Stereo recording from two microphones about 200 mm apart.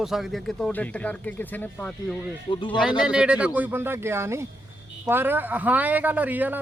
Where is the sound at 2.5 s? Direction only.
30° left (ahead or behind).